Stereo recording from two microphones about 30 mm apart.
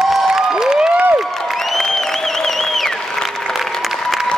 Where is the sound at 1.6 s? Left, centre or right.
Centre.